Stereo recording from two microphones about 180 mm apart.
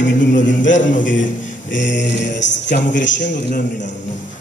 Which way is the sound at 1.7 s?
85° left.